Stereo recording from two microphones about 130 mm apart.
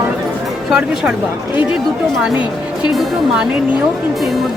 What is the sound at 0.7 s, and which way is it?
Speech, 5° right (ahead or behind).